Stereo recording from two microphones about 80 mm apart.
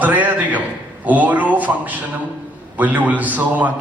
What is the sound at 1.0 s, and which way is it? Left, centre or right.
A man's voice, centre.